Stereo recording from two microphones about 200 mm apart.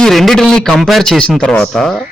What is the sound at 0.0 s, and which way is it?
A man's voice, centre (ahead or behind).